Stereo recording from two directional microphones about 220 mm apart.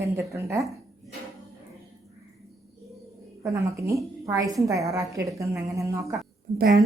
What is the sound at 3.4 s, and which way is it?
A woman's voice, 15° right (ahead or behind).